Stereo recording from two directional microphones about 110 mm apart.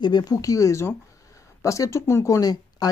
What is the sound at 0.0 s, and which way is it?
Speech, 40° left (ahead or behind).